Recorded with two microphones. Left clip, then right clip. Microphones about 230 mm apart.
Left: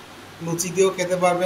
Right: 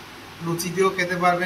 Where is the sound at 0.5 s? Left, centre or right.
Centre.